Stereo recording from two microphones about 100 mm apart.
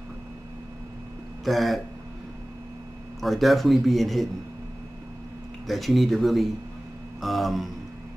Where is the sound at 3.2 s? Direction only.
Centre (ahead or behind).